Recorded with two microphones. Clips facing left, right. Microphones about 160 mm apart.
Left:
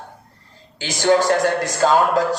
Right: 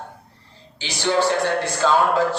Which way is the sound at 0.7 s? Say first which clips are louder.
Left 4 dB; 45° left (ahead or behind).